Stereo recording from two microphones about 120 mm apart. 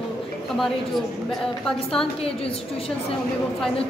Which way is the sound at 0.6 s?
Centre (ahead or behind).